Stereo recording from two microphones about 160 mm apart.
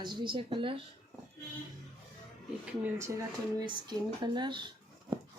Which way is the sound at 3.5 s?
30° right (ahead or behind).